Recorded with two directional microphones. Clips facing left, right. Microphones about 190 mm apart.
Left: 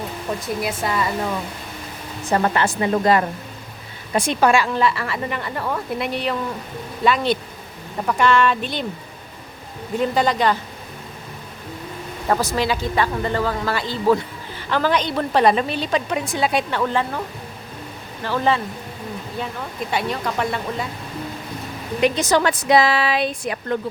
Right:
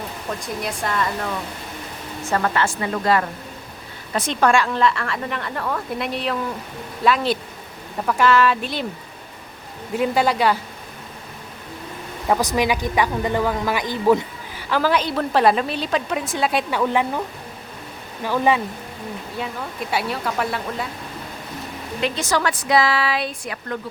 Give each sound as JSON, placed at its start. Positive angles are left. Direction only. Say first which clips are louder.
{"t": 0.3, "sound": "a woman's voice", "louder": "left 3 dB", "side_deg": 5}
{"t": 2.2, "sound": "speech", "louder": "left 2 dB", "side_deg": 20}
{"t": 4.1, "sound": "a woman's voice", "louder": "left 1 dB", "side_deg": 10}
{"t": 10.0, "sound": "a woman's voice", "louder": "even", "side_deg": -5}
{"t": 12.3, "sound": "a woman's voice", "louder": "right 1 dB", "side_deg": -15}
{"t": 14.7, "sound": "a woman's voice", "louder": "even", "side_deg": -5}
{"t": 19.9, "sound": "a woman's voice", "louder": "left 1 dB", "side_deg": -5}
{"t": 22.0, "sound": "speech", "louder": "left 4 dB", "side_deg": 15}